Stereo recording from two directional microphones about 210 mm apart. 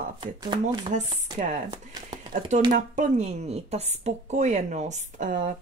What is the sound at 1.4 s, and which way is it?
A woman's voice, 35° right (ahead or behind).